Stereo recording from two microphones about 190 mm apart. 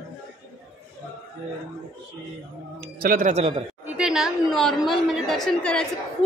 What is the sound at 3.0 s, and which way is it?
Speech, 45° right (ahead or behind).